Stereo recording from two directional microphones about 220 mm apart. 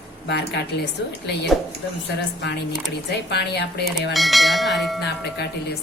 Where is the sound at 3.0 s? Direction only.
50° left (ahead or behind).